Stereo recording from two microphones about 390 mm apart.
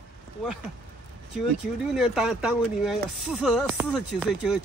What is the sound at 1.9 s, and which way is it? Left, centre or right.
Speech, centre.